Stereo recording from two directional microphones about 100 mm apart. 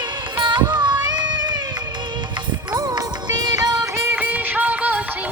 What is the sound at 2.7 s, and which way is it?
Music, 40° right (ahead or behind).